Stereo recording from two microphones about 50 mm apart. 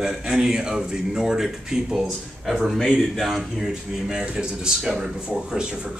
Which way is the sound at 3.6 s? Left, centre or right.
Centre.